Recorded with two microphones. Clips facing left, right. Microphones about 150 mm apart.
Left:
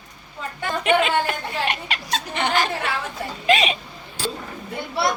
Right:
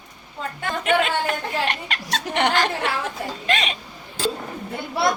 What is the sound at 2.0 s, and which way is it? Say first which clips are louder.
Speech: right 4 dB; 85° right.